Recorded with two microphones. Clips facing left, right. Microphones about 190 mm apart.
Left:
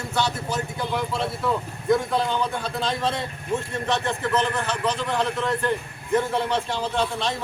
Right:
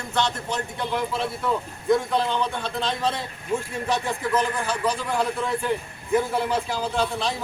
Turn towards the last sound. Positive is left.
turn(degrees=0)  # may be behind; listen again after turning